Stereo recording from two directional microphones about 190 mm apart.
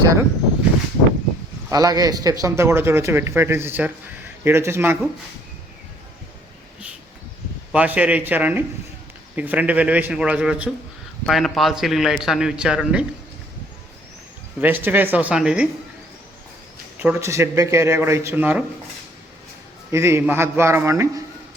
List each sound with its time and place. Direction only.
0.0 s speech: 15° right (ahead or behind)
1.7 s a man's voice: 20° right (ahead or behind)
7.7 s a man's voice: 10° right (ahead or behind)
14.6 s speech: 10° right (ahead or behind)
17.0 s speech: 10° right (ahead or behind)
19.9 s speech: 15° right (ahead or behind)